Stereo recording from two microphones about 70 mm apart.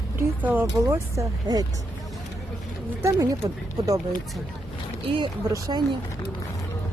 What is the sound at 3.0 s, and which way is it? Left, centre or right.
Speech, right.